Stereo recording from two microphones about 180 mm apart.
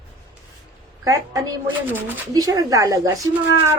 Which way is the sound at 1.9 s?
10° right (ahead or behind).